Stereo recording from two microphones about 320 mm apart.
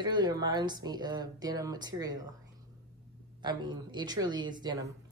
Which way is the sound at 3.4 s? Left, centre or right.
Centre.